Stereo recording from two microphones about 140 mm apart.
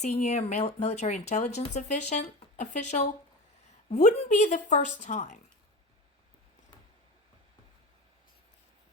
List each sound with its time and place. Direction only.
0.0 s speech: 55° left (ahead or behind)
4.2 s speech: 55° left (ahead or behind)